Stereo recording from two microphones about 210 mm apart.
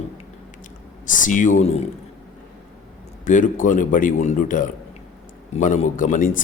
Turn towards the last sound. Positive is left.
turn(degrees=35)  # may be behind; listen again after turning